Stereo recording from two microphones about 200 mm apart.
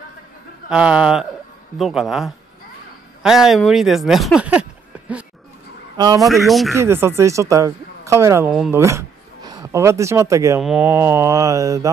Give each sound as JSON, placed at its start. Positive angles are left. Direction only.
{"t": 0.7, "sound": "speech", "side_deg": -5}
{"t": 5.9, "sound": "a man's voice", "side_deg": -20}
{"t": 6.2, "sound": "speech", "side_deg": 0}
{"t": 6.7, "sound": "speech", "side_deg": -10}
{"t": 8.5, "sound": "speech", "side_deg": 0}
{"t": 8.7, "sound": "speech", "side_deg": -15}
{"t": 10.6, "sound": "speech", "side_deg": -5}